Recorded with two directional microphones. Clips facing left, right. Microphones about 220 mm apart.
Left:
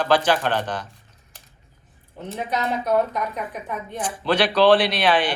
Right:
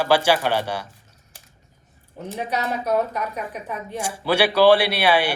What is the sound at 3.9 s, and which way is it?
Speech, 10° right (ahead or behind).